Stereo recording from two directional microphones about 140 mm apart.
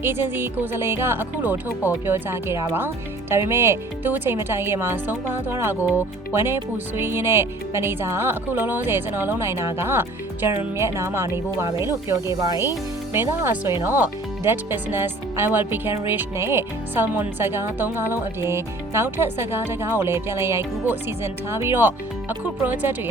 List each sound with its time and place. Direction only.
0.0 s speech: 15° right (ahead or behind)